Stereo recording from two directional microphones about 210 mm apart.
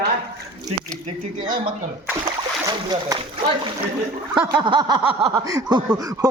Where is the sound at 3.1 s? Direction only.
20° right (ahead or behind).